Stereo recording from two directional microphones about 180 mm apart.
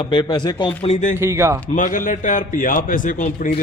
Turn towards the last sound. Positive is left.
turn(degrees=50)  # may be behind; listen again after turning